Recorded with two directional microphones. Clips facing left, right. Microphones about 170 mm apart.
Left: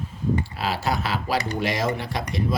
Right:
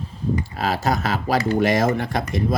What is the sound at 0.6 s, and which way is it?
Speech, 45° right (ahead or behind).